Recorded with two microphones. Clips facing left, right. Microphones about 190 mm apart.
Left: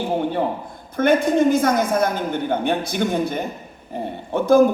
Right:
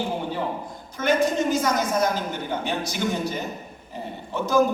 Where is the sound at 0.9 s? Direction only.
55° left (ahead or behind).